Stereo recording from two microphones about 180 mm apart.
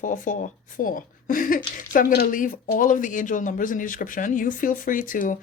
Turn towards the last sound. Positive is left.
turn(degrees=50)  # may be behind; listen again after turning